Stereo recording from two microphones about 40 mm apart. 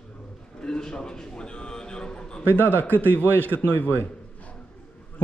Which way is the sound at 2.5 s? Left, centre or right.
Left.